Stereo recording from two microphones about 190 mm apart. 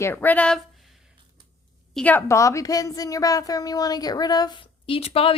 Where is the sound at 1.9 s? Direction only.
10° left (ahead or behind); by 5.3 s 30° left (ahead or behind).